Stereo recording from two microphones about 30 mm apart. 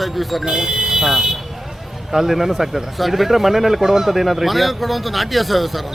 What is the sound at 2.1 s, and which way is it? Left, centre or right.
A man's voice, centre.